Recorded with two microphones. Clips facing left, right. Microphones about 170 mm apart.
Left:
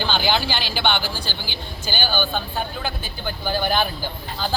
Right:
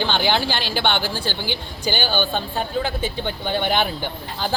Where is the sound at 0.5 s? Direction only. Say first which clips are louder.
Right 1 dB; 65° right (ahead or behind).